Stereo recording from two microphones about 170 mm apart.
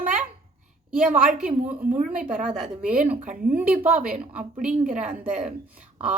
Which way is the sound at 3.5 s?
10° right (ahead or behind).